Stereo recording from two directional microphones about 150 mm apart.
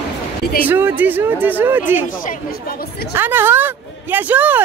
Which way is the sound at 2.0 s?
65° left (ahead or behind).